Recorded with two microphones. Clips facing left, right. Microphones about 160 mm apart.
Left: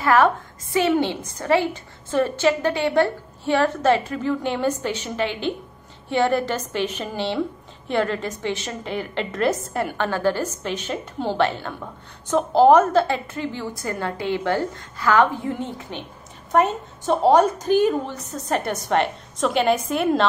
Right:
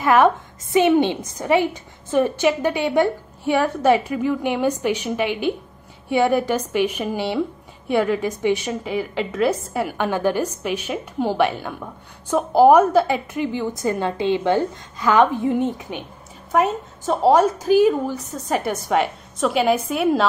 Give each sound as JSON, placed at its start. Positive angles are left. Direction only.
{"t": 0.0, "sound": "a woman's voice", "side_deg": -15}
{"t": 16.5, "sound": "a woman's voice", "side_deg": 0}